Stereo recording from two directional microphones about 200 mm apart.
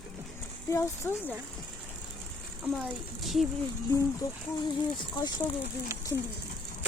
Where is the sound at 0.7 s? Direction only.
15° left (ahead or behind).